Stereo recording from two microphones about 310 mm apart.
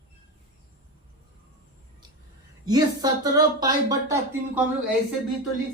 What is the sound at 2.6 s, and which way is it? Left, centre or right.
Speech, centre.